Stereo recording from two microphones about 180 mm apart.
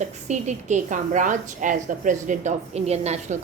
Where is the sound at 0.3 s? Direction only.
40° right (ahead or behind).